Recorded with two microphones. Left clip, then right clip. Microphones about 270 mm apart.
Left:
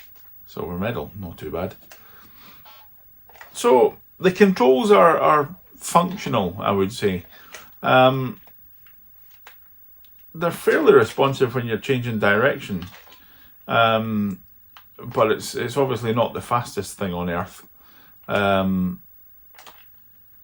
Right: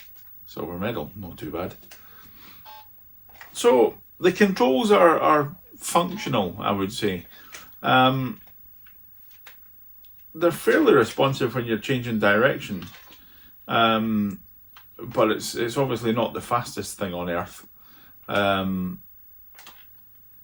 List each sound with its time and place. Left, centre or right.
0.4 s speech: left
10.0 s speech: left